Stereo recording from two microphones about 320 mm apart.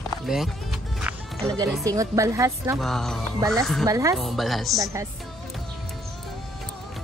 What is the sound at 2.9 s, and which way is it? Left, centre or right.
Speech, centre.